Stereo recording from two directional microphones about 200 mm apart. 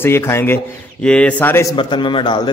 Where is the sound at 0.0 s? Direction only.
10° left (ahead or behind).